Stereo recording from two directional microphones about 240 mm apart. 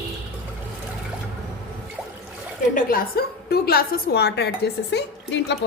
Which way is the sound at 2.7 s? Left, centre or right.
Left.